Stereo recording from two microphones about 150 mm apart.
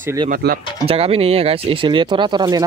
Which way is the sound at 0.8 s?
40° right (ahead or behind).